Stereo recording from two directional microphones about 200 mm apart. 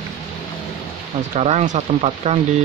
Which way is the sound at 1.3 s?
30° right (ahead or behind).